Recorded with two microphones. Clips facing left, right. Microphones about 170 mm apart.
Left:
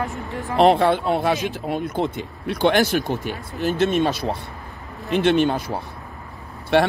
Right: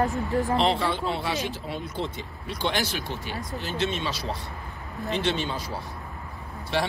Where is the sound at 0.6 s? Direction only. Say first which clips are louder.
Left 9 dB; 55° left (ahead or behind).